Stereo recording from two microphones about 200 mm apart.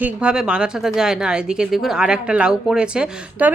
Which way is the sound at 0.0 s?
5° right (ahead or behind).